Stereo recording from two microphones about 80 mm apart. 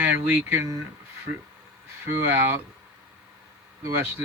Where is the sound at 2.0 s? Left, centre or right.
Right.